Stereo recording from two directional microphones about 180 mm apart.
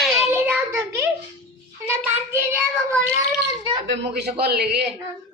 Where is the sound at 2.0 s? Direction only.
10° right (ahead or behind).